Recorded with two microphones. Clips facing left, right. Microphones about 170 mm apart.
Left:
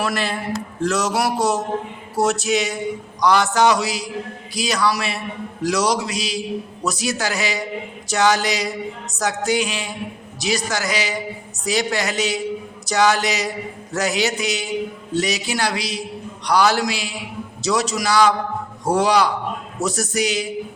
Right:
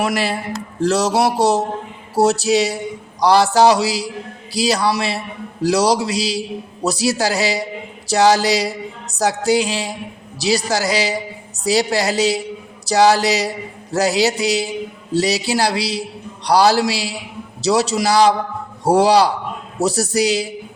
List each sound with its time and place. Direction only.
0.8 s a man's voice: 35° right (ahead or behind)